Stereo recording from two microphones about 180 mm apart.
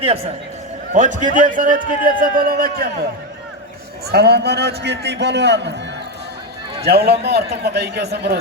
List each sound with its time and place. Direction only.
0.0 s a man's voice: 35° right (ahead or behind)
0.9 s a man's voice: 45° right (ahead or behind)
4.1 s a man's voice: 65° right (ahead or behind)
6.8 s a man's voice: 65° right (ahead or behind)